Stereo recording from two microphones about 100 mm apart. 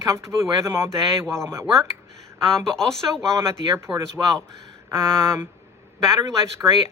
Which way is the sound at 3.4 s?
30° right (ahead or behind).